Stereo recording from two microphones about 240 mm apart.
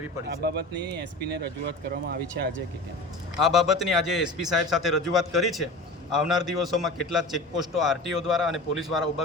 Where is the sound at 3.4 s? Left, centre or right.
Centre.